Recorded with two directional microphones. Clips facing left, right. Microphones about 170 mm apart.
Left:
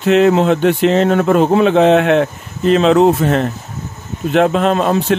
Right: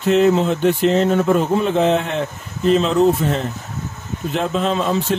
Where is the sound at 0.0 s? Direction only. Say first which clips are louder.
Left 4 dB; 70° left (ahead or behind).